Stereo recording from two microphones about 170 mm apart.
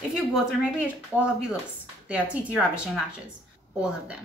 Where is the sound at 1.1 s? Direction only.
10° right (ahead or behind).